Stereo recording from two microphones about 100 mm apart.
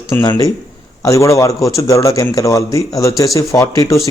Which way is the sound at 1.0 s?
30° left (ahead or behind).